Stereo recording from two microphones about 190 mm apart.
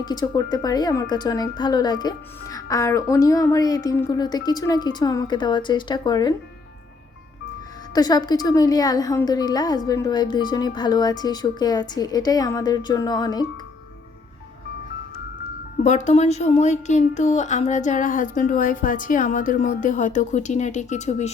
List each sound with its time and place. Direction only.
0.0 s a woman's voice: 20° left (ahead or behind)
7.9 s a woman's voice: 20° left (ahead or behind)
15.8 s a woman's voice: 40° left (ahead or behind)